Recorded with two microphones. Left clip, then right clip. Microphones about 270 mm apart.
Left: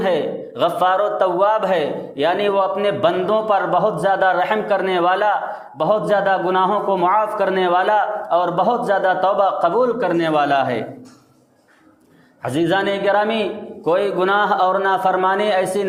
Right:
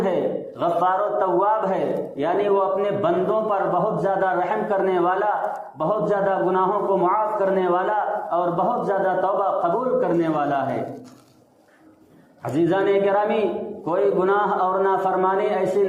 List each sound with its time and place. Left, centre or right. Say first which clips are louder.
0.6 s a man's voice: left 4 dB; left
12.4 s a man's voice: left 2 dB; left